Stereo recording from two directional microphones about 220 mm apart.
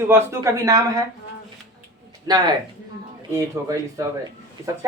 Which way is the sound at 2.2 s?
20° right (ahead or behind).